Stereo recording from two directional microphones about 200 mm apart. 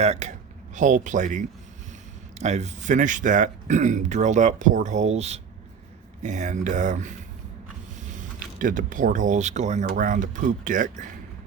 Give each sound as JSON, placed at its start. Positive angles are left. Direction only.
{"t": 0.0, "sound": "speech", "side_deg": -35}